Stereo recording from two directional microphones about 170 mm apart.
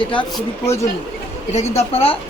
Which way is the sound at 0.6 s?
15° left (ahead or behind).